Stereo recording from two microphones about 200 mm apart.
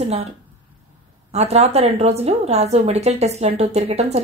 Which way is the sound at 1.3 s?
30° right (ahead or behind).